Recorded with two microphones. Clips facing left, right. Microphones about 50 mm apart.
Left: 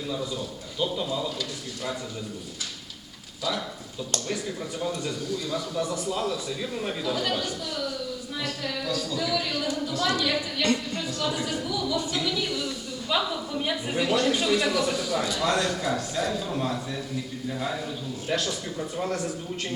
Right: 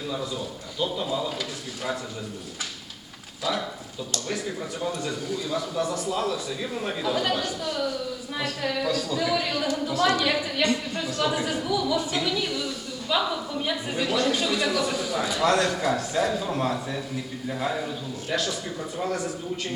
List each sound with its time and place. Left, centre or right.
0.1 s a man's voice: centre
4.8 s a man's voice: centre
7.6 s speech: right
8.9 s a man's voice: centre
9.1 s a man's voice: right
18.4 s speech: centre